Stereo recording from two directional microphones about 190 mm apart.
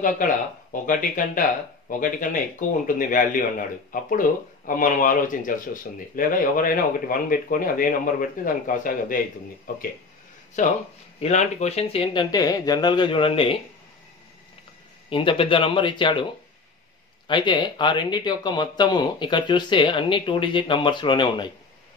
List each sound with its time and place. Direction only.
0.0 s speech: 45° left (ahead or behind); by 13.6 s 30° left (ahead or behind)
15.0 s speech: 30° left (ahead or behind)
17.3 s speech: 25° left (ahead or behind)